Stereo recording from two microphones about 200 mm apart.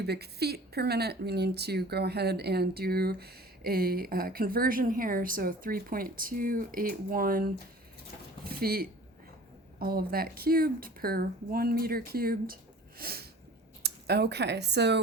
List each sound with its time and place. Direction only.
0.0 s speech: 55° right (ahead or behind)
8.6 s speech: 50° right (ahead or behind)